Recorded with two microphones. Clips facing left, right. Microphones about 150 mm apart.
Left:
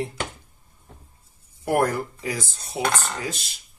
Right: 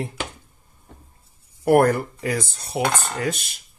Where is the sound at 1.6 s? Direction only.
60° right (ahead or behind).